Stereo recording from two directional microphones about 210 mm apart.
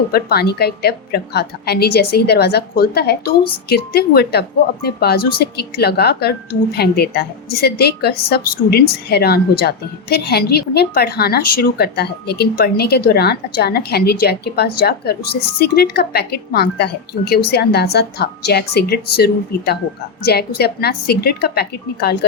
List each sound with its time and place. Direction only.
0.1 s a woman's voice: 50° left (ahead or behind)